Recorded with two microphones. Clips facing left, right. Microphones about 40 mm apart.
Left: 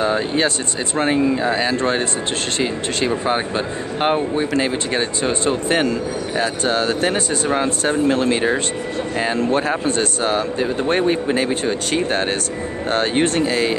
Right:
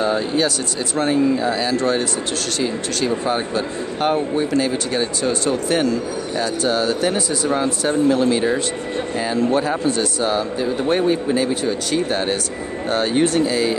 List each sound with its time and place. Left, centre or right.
0.0 s speech: left
3.3 s speech: left
6.7 s speech: left